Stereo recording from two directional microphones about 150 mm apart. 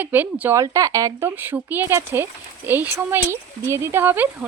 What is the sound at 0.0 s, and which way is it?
Speech, 10° right (ahead or behind).